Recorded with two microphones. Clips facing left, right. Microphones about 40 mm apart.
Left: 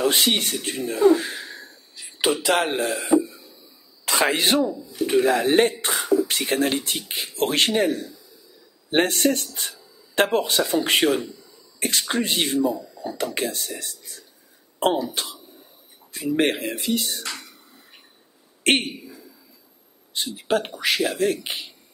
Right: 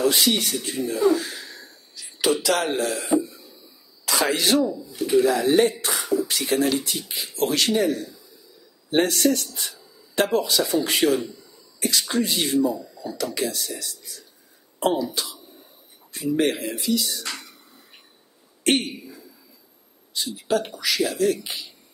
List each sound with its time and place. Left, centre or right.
0.0 s speech: left
16.3 s speech: left
17.2 s speech: centre
18.6 s speech: left
20.2 s speech: left